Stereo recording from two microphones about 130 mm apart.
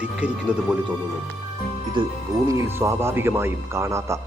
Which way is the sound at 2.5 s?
20° right (ahead or behind).